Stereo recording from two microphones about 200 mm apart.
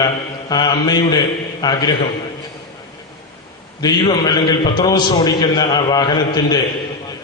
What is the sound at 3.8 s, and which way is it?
A man's voice, 20° left (ahead or behind).